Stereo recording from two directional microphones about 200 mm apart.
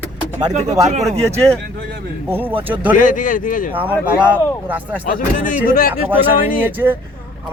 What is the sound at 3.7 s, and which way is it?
A man's voice, 10° right (ahead or behind).